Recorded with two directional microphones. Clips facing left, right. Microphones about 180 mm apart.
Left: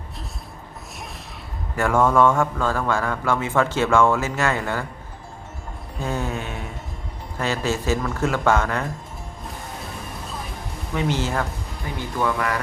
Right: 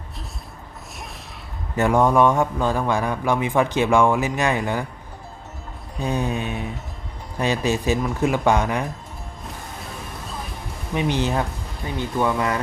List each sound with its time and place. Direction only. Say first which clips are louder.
1.7 s a man's voice: right 1 dB; 20° right (ahead or behind)
6.0 s a man's voice: right 3 dB; 15° right (ahead or behind)
10.9 s a man's voice: right 2 dB; 15° right (ahead or behind)